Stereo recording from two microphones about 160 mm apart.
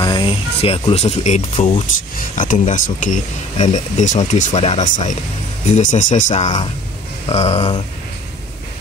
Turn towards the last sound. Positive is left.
turn(degrees=40)  # may be behind; listen again after turning